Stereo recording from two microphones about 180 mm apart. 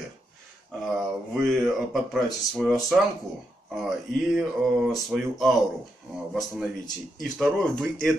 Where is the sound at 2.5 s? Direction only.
Centre (ahead or behind).